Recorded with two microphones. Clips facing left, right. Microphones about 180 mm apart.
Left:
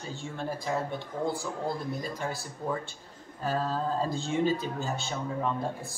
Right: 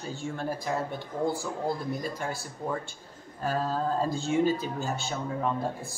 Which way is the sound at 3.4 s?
Centre (ahead or behind).